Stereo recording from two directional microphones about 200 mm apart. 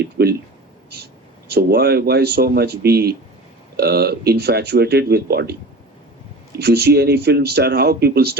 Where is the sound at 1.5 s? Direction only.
55° right (ahead or behind).